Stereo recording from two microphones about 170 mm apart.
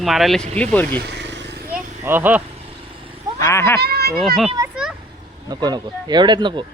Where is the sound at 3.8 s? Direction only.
70° right (ahead or behind).